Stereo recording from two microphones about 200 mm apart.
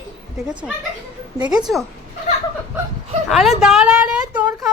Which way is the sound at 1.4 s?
20° right (ahead or behind).